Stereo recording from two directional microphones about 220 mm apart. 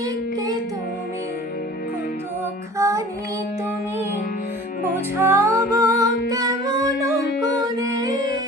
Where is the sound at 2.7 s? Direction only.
15° right (ahead or behind).